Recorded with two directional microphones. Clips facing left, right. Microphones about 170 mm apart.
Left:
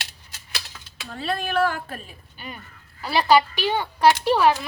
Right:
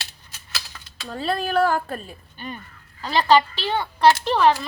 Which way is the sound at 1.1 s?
35° right (ahead or behind).